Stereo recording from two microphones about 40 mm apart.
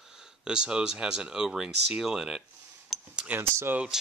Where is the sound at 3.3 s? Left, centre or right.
Right.